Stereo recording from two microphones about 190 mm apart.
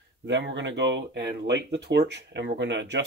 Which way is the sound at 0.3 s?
70° right (ahead or behind).